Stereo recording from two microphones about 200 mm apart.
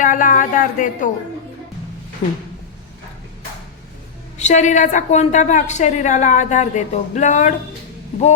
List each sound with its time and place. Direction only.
0.0 s a woman's voice: 40° left (ahead or behind)
4.4 s a woman's voice: 35° left (ahead or behind)